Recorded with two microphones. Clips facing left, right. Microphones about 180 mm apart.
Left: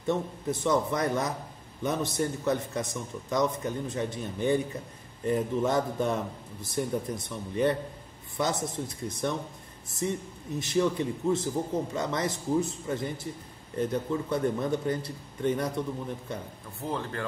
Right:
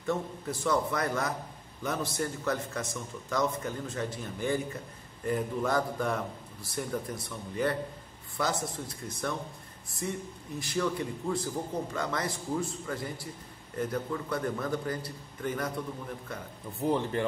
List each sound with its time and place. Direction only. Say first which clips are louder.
0.0 s a man's voice: left 3 dB; 20° left (ahead or behind)
10.6 s a man's voice: left 4 dB; 20° left (ahead or behind)
16.8 s speech: right 5 dB; 20° right (ahead or behind)